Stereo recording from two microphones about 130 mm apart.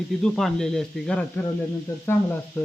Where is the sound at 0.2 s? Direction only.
5° left (ahead or behind).